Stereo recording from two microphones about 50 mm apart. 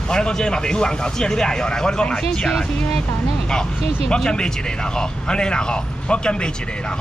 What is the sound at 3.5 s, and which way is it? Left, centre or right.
Speech, centre.